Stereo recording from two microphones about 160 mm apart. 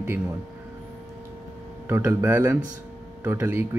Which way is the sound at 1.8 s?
10° right (ahead or behind).